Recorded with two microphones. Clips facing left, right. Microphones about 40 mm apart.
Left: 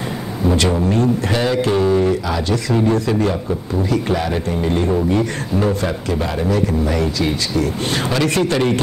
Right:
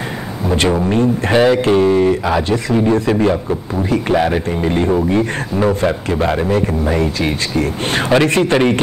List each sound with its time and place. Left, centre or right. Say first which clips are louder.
0.6 s speech: right 5 dB; right
1.8 s a man's voice: right 3 dB; right
7.5 s a man's voice: right 2 dB; right